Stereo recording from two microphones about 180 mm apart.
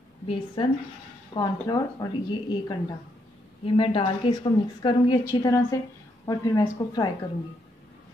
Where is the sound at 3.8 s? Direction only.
30° left (ahead or behind).